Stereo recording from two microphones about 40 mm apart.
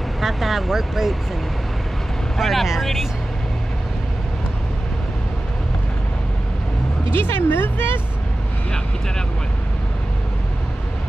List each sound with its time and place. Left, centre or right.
0.2 s speech: centre
2.3 s speech: centre
7.2 s speech: left